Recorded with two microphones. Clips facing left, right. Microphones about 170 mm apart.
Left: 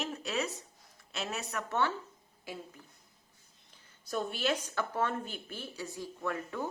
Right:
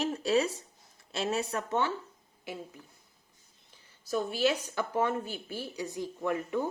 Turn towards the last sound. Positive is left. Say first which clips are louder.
# right 5 dB
turn(degrees=-15)  # may be behind; listen again after turning